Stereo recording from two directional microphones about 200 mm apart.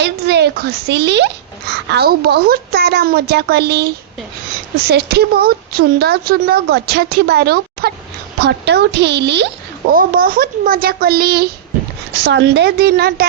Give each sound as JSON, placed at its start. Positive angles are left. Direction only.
{"t": 0.0, "sound": "a child's voice", "side_deg": -55}
{"t": 9.9, "sound": "a woman's voice", "side_deg": -45}